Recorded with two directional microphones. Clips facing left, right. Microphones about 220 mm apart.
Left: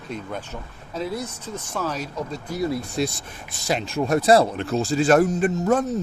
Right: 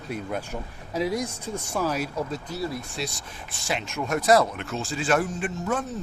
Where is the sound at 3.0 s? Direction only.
45° left (ahead or behind).